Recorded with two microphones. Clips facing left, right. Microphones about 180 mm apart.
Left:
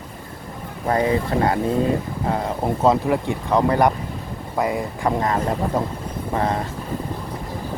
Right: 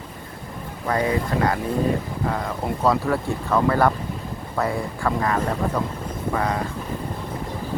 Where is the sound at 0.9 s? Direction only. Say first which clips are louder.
Left 3 dB; 25° left (ahead or behind).